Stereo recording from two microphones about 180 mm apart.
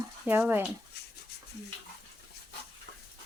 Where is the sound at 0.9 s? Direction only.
60° left (ahead or behind).